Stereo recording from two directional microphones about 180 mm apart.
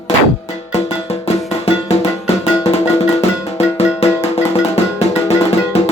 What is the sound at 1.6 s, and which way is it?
Music, 35° left (ahead or behind).